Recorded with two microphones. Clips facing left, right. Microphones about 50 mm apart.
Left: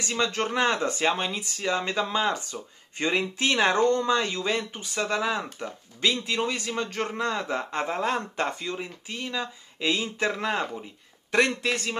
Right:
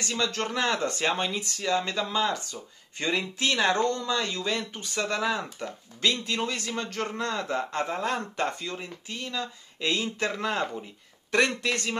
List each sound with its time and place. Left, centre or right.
0.2 s speech: left
0.8 s speech: centre
1.7 s speech: left; by 12.0 s centre